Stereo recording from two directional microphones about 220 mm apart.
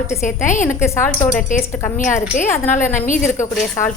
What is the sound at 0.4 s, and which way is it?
A woman's voice, 35° left (ahead or behind).